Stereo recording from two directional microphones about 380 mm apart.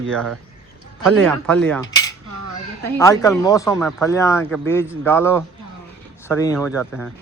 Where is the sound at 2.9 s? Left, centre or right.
Centre.